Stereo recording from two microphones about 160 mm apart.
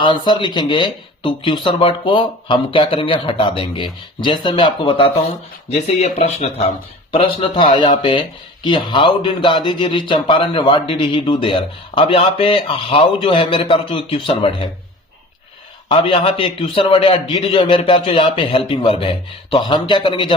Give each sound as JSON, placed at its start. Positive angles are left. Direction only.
{"t": 0.0, "sound": "speech", "side_deg": 30}
{"t": 15.9, "sound": "speech", "side_deg": 35}